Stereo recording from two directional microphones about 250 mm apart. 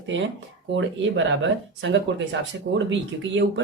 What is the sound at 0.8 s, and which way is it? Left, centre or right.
Speech, right.